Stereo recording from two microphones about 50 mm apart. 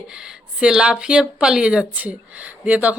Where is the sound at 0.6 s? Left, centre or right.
Centre.